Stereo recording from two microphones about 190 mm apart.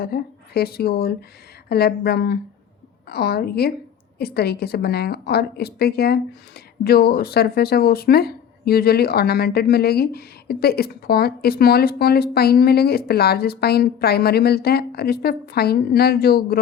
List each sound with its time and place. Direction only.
0.0 s speech: 55° left (ahead or behind)